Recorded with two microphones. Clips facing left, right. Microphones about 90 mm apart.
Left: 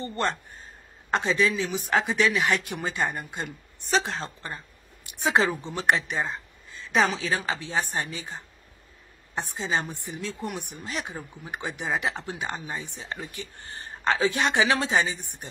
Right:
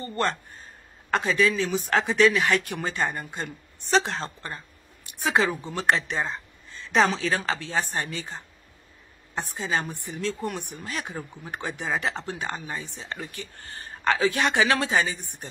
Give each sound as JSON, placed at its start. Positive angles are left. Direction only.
{"t": 0.0, "sound": "a woman's voice", "side_deg": 20}
{"t": 3.8, "sound": "a woman's voice", "side_deg": 0}
{"t": 5.2, "sound": "a woman's voice", "side_deg": 25}
{"t": 5.7, "sound": "a woman's voice", "side_deg": 15}